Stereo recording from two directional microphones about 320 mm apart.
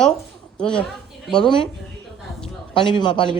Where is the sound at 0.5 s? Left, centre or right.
Centre.